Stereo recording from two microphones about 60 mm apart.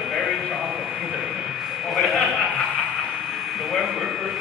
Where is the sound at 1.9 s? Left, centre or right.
Centre.